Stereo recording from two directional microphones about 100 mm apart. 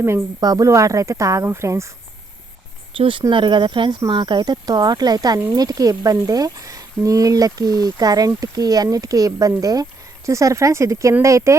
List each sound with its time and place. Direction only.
0.3 s speech: 40° right (ahead or behind)
3.0 s speech: 55° right (ahead or behind); by 11.5 s 30° right (ahead or behind)